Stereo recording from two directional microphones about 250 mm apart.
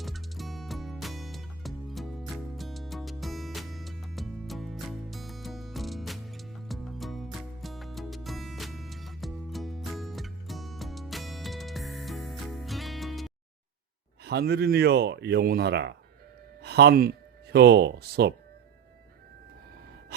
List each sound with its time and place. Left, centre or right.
0.0 s music: centre
14.3 s speech: right